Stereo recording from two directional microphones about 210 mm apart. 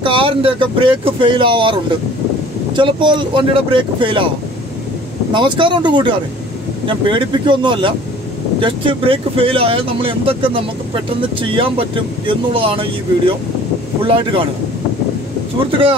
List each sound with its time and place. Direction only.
0.0 s speech: 25° right (ahead or behind)
5.3 s speech: 20° right (ahead or behind)
14.0 s speech: 25° right (ahead or behind)